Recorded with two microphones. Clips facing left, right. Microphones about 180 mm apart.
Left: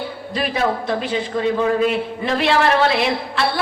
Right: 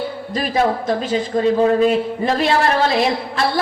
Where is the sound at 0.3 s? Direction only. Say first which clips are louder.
Right 2 dB; 40° right (ahead or behind).